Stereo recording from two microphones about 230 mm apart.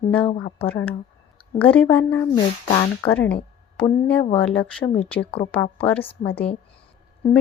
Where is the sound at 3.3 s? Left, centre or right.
Left.